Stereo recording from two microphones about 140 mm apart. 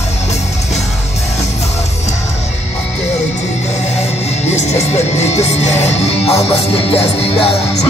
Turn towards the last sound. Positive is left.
turn(degrees=45)  # may be behind; listen again after turning